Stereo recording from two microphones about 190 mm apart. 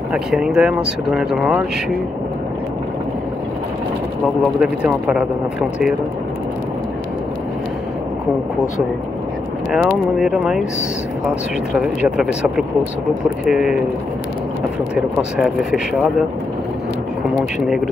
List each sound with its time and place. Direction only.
0.1 s speech: centre (ahead or behind)
4.4 s speech: 5° right (ahead or behind)
9.7 s speech: centre (ahead or behind)
11.8 s speech: 5° right (ahead or behind)
15.0 s speech: centre (ahead or behind)